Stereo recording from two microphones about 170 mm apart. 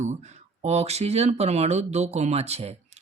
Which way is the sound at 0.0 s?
45° right (ahead or behind).